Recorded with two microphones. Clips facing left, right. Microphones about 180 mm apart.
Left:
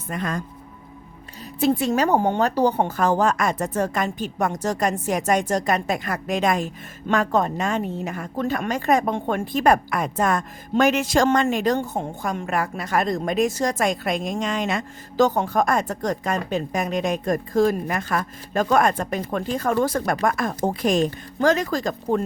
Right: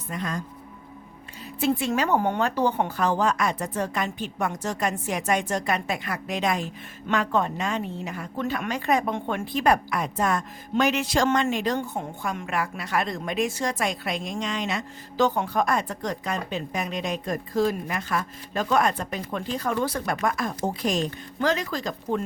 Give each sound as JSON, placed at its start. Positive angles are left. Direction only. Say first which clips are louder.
{"t": 0.1, "sound": "speech", "louder": "left 4 dB", "side_deg": 55}
{"t": 1.5, "sound": "a woman's voice", "louder": "left 4 dB", "side_deg": 40}
{"t": 2.1, "sound": "speech", "louder": "left 3 dB", "side_deg": 25}
{"t": 2.4, "sound": "a woman's voice", "louder": "left 4 dB", "side_deg": 40}